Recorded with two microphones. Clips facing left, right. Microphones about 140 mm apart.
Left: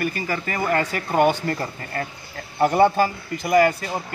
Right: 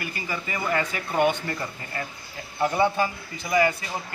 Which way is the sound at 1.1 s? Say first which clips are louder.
Left 4 dB; 35° left (ahead or behind).